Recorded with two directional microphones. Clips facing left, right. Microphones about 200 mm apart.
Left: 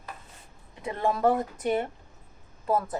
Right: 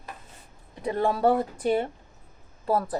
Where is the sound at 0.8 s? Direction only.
35° right (ahead or behind).